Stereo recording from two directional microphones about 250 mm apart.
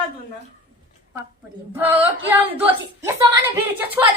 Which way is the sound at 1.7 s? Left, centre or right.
Centre.